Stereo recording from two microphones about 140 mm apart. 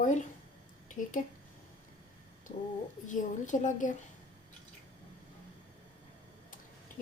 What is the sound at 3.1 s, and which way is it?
Speech, 60° left (ahead or behind).